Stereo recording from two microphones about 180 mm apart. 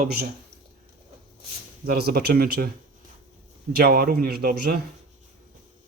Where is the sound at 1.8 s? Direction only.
60° right (ahead or behind).